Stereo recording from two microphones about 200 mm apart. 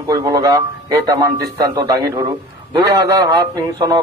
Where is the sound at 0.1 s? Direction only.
20° right (ahead or behind).